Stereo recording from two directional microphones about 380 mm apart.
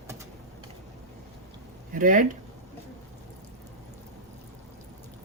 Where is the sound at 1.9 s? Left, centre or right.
Right.